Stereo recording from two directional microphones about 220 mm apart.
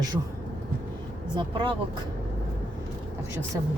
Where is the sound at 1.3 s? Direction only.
20° right (ahead or behind).